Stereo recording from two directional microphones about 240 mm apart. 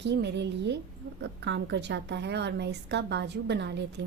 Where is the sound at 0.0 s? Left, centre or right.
Right.